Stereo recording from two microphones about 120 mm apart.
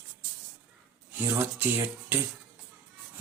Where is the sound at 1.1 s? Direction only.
15° right (ahead or behind).